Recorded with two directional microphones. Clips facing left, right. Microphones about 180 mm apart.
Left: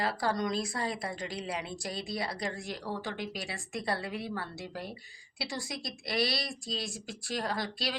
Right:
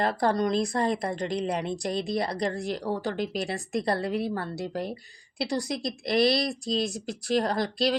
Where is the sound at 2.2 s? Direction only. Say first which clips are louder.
Right 7 dB; 40° right (ahead or behind).